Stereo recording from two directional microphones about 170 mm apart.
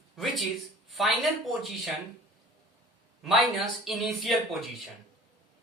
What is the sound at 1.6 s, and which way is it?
Speech, centre (ahead or behind).